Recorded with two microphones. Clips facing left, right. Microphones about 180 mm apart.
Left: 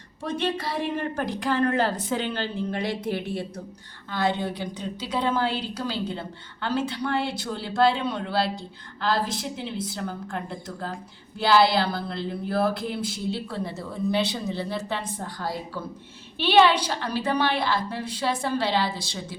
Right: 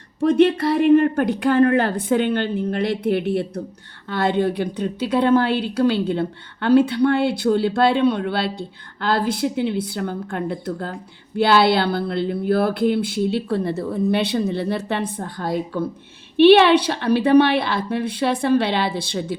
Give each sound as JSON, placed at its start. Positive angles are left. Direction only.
{"t": 0.3, "sound": "a woman's voice", "side_deg": -60}